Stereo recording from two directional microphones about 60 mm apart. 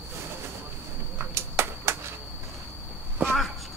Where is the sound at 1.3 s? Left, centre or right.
Right.